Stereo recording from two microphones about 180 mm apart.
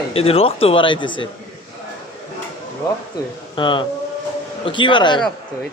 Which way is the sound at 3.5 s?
25° left (ahead or behind).